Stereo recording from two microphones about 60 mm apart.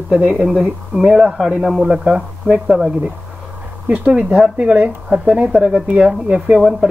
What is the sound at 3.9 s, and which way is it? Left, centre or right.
Speech, right.